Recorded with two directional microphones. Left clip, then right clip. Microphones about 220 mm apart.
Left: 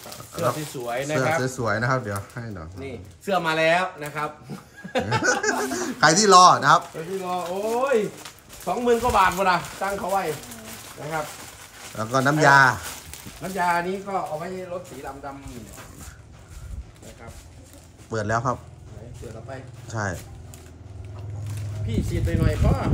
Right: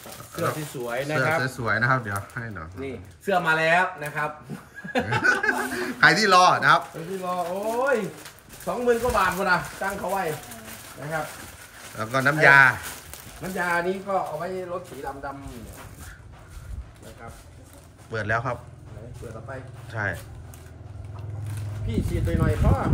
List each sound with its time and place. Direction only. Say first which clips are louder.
0.0 s speech: left 3 dB; 5° left (ahead or behind)
1.4 s speech: right 1 dB; 15° left (ahead or behind)
4.8 s laughter: left 1 dB; 5° left (ahead or behind)
5.3 s speech: even; 5° left (ahead or behind)
7.2 s speech: even; 5° left (ahead or behind)
12.0 s speech: even; 20° left (ahead or behind)
13.4 s speech: left 2 dB; 5° left (ahead or behind)
18.1 s speech: left 2 dB; 20° left (ahead or behind)
19.9 s speech: right 1 dB; 25° left (ahead or behind)
21.5 s speech: left 1 dB; centre (ahead or behind)